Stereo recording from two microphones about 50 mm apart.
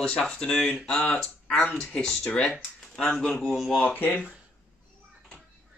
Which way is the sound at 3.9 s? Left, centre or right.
Left.